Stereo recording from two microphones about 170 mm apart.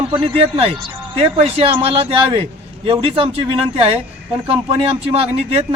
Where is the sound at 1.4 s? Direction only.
35° right (ahead or behind).